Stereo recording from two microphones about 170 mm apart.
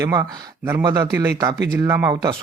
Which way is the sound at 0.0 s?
15° right (ahead or behind).